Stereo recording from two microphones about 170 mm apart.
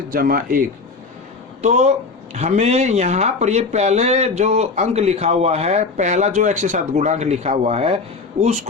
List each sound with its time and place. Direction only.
0.1 s a man's voice: 55° right (ahead or behind)
1.6 s speech: 40° right (ahead or behind)